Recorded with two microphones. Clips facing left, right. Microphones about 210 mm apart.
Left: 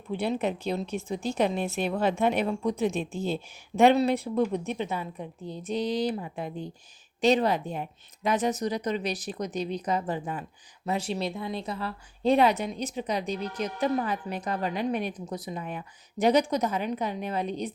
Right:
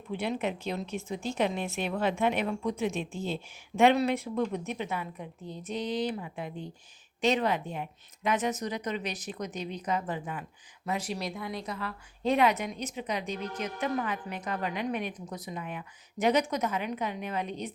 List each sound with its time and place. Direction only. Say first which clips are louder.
0.1 s a woman's voice: left 3 dB; 35° left (ahead or behind)